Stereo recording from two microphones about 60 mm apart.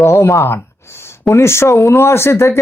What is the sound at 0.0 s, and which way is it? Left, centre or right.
Speech, left.